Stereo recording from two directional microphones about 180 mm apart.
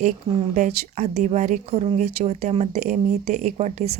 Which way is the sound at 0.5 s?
40° right (ahead or behind).